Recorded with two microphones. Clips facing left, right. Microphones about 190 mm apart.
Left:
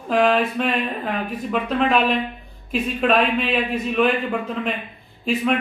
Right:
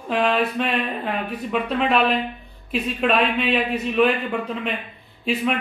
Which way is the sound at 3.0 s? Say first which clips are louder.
Left 1 dB; centre (ahead or behind).